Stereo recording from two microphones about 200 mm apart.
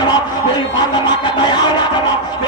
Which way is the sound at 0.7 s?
25° left (ahead or behind).